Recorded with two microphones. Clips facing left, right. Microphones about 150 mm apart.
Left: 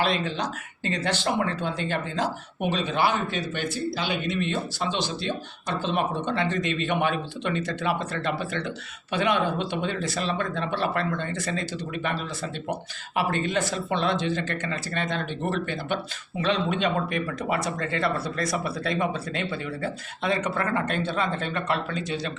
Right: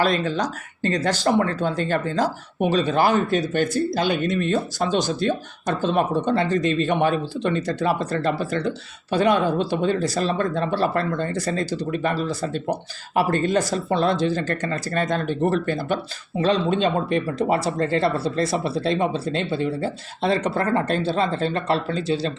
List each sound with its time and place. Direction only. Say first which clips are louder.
0.0 s speech: right 5 dB; 40° right (ahead or behind)